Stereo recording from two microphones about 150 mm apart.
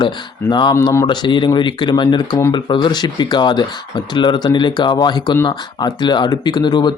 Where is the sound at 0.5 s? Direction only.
25° left (ahead or behind).